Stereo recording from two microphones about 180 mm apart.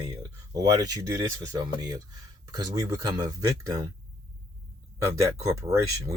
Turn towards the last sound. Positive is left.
turn(degrees=-15)  # may be behind; listen again after turning